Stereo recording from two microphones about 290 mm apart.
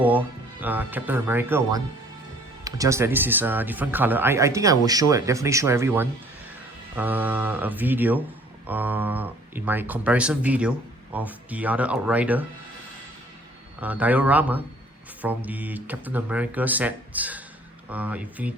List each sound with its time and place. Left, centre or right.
0.0 s speech: centre
13.8 s speech: centre